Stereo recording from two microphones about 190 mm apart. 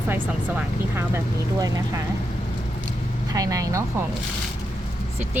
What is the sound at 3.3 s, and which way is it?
Speech, 20° right (ahead or behind).